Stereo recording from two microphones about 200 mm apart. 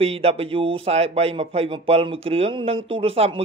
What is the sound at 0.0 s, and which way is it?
Speech, 30° right (ahead or behind).